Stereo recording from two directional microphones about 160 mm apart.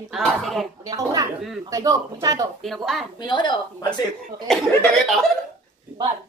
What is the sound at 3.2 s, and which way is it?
Speech, 30° left (ahead or behind).